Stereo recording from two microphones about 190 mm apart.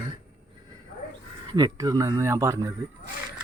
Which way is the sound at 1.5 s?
20° right (ahead or behind).